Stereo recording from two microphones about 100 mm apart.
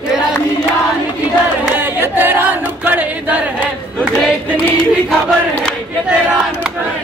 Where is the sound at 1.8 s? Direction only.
20° right (ahead or behind).